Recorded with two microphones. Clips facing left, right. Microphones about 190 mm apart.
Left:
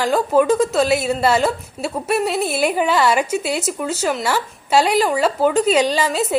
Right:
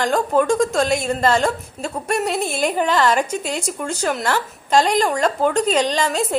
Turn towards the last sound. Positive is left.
turn(degrees=5)  # may be behind; listen again after turning